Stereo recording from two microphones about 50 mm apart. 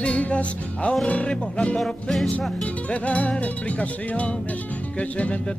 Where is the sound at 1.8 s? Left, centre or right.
Centre.